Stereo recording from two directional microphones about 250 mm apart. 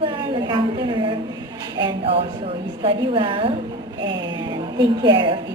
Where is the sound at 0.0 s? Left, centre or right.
Centre.